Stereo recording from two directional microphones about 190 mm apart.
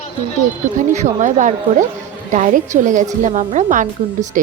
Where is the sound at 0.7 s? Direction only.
40° right (ahead or behind).